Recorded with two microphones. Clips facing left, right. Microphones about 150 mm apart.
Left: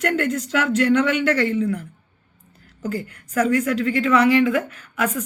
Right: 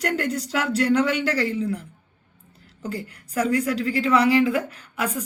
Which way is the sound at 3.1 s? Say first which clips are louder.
Left 3 dB; 35° right (ahead or behind).